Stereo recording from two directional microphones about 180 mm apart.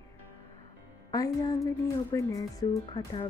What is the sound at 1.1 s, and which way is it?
Speech, 20° left (ahead or behind).